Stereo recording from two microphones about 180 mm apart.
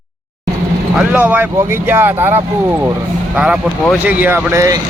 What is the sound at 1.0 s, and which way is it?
Speech, 10° right (ahead or behind).